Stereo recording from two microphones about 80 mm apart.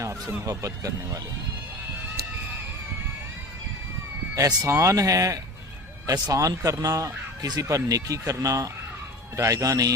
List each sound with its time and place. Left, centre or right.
0.4 s speech: right
4.4 s speech: right
4.7 s speech: right